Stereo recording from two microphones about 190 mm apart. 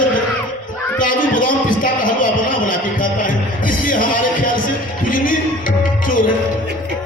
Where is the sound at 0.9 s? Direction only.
45° left (ahead or behind).